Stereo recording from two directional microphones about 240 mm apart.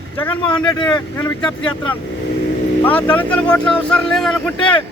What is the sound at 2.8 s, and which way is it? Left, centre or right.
Speech, centre.